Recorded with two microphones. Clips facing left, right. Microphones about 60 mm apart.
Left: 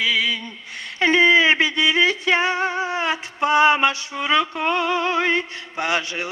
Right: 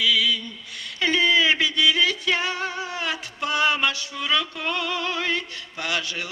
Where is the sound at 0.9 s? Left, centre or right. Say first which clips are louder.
Left 5 dB; left.